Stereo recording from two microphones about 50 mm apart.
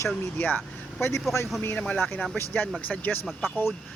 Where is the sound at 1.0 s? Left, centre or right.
Left.